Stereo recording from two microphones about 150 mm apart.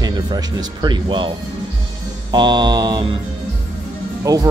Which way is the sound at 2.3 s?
30° right (ahead or behind).